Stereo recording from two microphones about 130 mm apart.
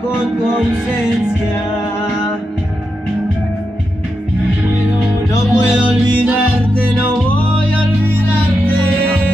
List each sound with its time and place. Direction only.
5.3 s music: 20° left (ahead or behind)
5.7 s music: 10° right (ahead or behind)